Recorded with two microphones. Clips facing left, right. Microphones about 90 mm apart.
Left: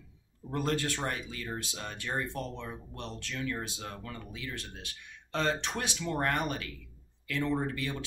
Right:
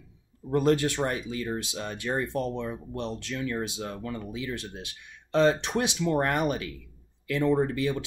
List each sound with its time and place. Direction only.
0.5 s speech: 15° right (ahead or behind)